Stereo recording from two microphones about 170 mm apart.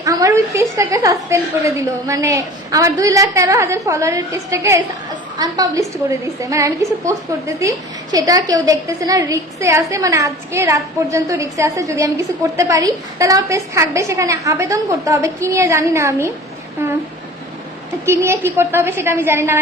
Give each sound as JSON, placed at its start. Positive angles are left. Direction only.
{"t": 0.0, "sound": "a woman's voice", "side_deg": -20}
{"t": 18.0, "sound": "a woman's voice", "side_deg": -15}